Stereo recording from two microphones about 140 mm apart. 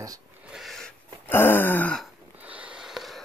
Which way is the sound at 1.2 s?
15° left (ahead or behind).